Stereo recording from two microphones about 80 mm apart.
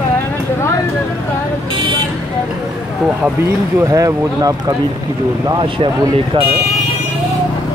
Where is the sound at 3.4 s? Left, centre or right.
Right.